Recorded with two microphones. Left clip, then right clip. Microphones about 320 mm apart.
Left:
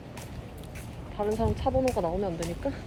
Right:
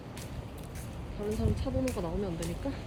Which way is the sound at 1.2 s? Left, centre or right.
Centre.